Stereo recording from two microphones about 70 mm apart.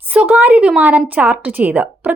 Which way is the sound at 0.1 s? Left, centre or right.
Right.